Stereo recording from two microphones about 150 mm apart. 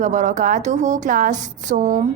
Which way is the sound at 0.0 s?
55° right (ahead or behind).